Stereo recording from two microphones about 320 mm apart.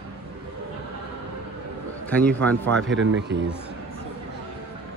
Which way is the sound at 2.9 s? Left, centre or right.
Right.